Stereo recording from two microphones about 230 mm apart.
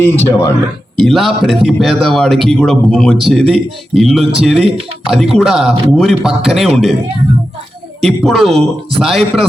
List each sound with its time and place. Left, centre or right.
0.0 s a man's voice: centre
8.0 s a man's voice: centre